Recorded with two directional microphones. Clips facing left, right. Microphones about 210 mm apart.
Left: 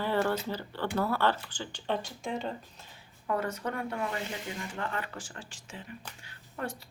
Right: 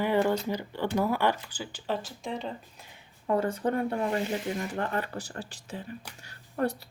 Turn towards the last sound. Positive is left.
turn(degrees=-45)  # may be behind; listen again after turning